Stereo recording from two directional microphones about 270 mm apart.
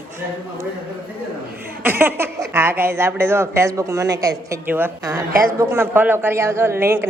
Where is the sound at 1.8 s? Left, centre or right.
Centre.